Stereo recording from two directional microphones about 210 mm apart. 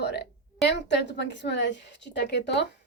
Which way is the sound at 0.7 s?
55° left (ahead or behind).